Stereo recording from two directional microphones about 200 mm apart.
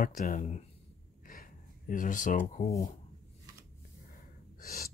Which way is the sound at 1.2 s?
45° left (ahead or behind).